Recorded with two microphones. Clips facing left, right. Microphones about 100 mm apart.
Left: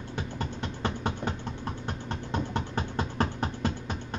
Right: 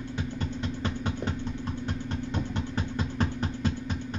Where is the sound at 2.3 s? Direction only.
50° left (ahead or behind).